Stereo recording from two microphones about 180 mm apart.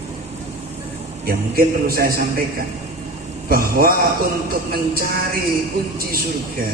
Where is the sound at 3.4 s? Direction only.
55° right (ahead or behind).